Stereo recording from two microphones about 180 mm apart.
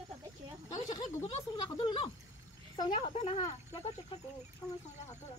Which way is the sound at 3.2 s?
35° left (ahead or behind).